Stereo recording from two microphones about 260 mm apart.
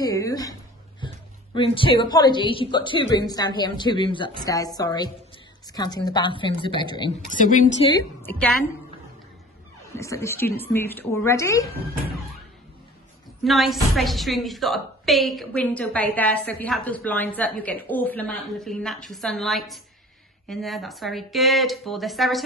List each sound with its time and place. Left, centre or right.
0.0 s a sound: centre
1.0 s a woman's voice: centre
7.2 s a woman's voice: left
7.9 s a woman's voice: centre
9.9 s a woman's voice: centre
13.4 s a woman's voice: centre